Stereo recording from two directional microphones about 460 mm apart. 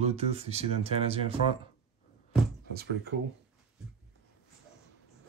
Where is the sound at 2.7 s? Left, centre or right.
Right.